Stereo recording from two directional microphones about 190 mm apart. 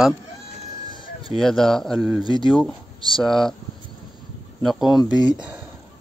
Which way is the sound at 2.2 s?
25° left (ahead or behind).